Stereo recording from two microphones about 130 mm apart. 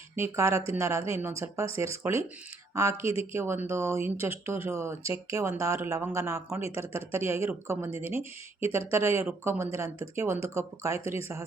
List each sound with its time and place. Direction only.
0.2 s speech: 20° right (ahead or behind)